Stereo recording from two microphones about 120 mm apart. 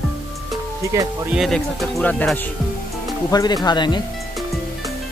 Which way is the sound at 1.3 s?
Centre (ahead or behind).